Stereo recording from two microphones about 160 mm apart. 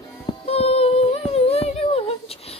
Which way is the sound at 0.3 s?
40° left (ahead or behind).